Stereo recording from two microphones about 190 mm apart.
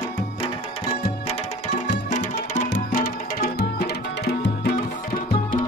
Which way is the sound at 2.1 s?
40° left (ahead or behind).